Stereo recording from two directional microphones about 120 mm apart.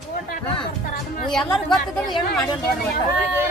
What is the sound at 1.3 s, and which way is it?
Speech, 5° left (ahead or behind).